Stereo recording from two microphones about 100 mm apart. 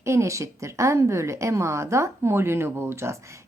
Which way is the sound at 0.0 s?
30° right (ahead or behind).